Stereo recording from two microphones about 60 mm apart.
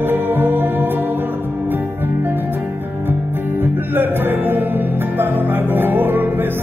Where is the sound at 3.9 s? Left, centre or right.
Right.